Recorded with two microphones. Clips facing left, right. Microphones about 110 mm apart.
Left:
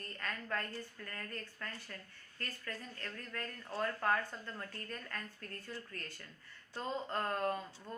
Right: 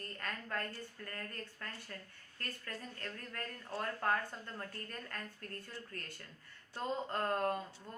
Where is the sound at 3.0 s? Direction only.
35° right (ahead or behind).